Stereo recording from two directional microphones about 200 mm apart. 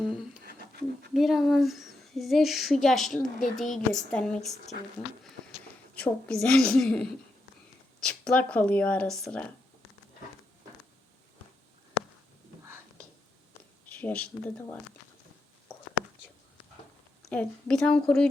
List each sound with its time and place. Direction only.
0.0 s speech: 5° right (ahead or behind)
0.4 s a sound: 50° right (ahead or behind)
1.1 s speech: centre (ahead or behind)
5.9 s speech: 5° left (ahead or behind)
13.9 s speech: 5° left (ahead or behind)
17.2 s speech: 5° left (ahead or behind)